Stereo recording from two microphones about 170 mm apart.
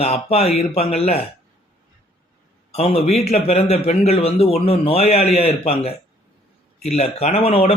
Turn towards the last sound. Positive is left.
turn(degrees=35)  # may be behind; listen again after turning